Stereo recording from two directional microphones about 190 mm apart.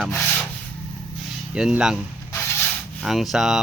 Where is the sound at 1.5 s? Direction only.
5° right (ahead or behind).